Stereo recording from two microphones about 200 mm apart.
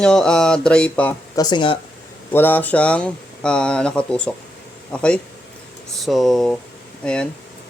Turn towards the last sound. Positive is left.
turn(degrees=5)  # may be behind; listen again after turning